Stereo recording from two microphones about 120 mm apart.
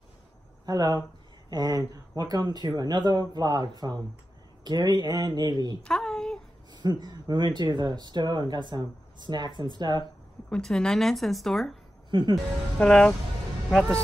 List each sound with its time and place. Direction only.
0.7 s speech: 30° right (ahead or behind)
5.8 s a sound: 5° left (ahead or behind)
6.7 s speech: 35° right (ahead or behind)
10.5 s speech: 5° left (ahead or behind)
12.1 s speech: 40° right (ahead or behind)
12.7 s speech: 10° left (ahead or behind)